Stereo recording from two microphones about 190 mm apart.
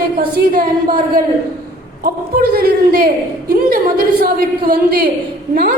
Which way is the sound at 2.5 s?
55° right (ahead or behind).